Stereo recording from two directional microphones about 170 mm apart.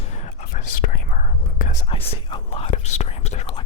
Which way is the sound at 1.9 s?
35° left (ahead or behind).